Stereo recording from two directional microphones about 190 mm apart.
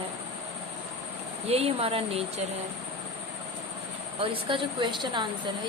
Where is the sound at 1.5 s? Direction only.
30° right (ahead or behind).